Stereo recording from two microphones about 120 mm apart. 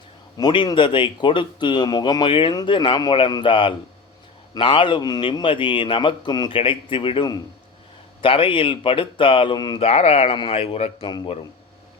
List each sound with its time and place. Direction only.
0.3 s a man's voice: 40° left (ahead or behind)
9.8 s speech: 60° left (ahead or behind)
10.3 s a man's voice: 50° left (ahead or behind)